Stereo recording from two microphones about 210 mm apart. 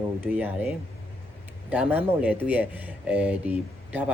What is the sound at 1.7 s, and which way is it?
Speech, 10° right (ahead or behind).